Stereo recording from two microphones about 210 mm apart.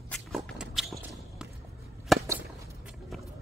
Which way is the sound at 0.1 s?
Centre (ahead or behind).